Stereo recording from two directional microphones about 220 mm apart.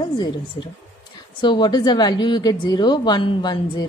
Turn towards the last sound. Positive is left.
turn(degrees=20)  # may be behind; listen again after turning